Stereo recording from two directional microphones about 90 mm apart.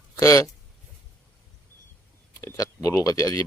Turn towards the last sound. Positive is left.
turn(degrees=40)  # may be behind; listen again after turning